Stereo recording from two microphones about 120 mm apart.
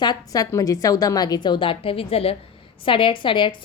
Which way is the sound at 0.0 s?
35° left (ahead or behind).